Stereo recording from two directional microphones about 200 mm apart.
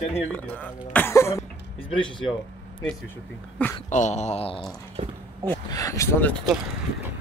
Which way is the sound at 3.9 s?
35° left (ahead or behind).